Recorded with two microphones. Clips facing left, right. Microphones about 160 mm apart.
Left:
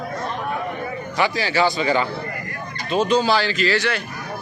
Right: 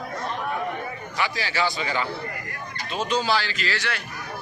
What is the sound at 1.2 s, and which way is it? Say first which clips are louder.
Speech: left 6 dB; 25° left (ahead or behind).